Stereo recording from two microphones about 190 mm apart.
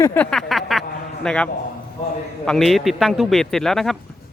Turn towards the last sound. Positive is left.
turn(degrees=0)  # may be behind; listen again after turning